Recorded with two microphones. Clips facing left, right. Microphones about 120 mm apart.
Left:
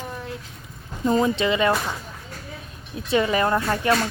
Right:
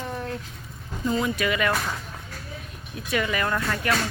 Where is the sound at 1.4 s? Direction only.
25° left (ahead or behind).